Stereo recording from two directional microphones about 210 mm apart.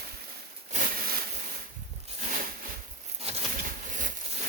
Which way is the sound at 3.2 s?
35° right (ahead or behind).